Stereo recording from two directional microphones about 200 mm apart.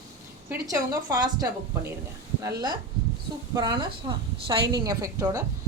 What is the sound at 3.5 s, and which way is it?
A woman's voice, 20° right (ahead or behind).